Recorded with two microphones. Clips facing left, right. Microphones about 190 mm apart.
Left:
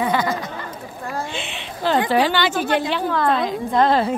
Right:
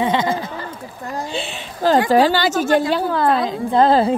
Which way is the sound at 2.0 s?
40° right (ahead or behind).